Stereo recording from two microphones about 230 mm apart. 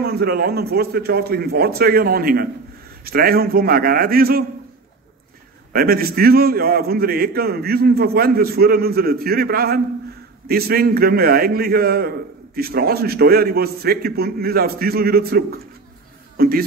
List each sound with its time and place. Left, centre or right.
0.0 s a man's voice: right
5.7 s a man's voice: right